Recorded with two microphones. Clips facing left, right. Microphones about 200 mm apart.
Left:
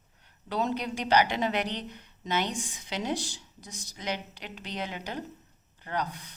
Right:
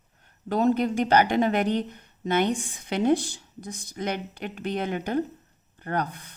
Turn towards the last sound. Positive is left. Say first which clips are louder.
# right 4 dB
turn(degrees=-55)  # may be behind; listen again after turning